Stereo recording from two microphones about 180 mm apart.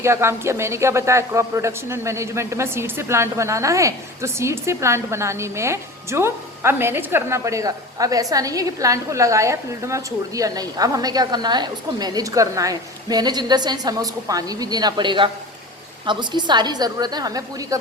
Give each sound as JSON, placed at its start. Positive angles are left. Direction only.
{"t": 0.0, "sound": "a woman's voice", "side_deg": -15}